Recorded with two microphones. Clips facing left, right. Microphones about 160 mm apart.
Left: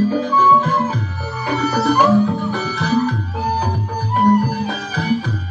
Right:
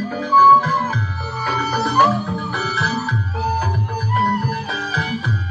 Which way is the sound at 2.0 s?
15° left (ahead or behind).